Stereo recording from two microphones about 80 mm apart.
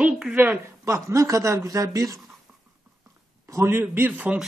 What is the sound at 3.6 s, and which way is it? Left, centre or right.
Speech, right.